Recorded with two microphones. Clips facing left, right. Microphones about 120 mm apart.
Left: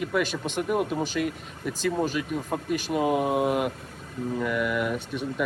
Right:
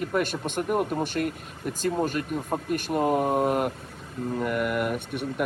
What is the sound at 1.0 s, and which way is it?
Speech, 50° right (ahead or behind).